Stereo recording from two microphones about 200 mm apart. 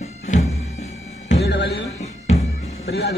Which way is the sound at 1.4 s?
55° left (ahead or behind).